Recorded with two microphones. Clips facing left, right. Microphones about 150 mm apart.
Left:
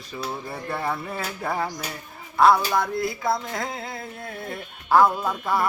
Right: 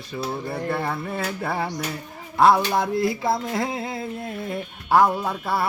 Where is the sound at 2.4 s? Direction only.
25° right (ahead or behind).